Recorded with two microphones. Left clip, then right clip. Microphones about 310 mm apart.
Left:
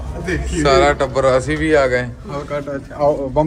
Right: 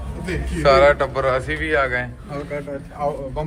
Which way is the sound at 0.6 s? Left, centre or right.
Centre.